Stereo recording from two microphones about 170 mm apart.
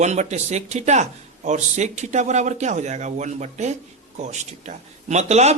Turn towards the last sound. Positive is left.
turn(degrees=-40)  # may be behind; listen again after turning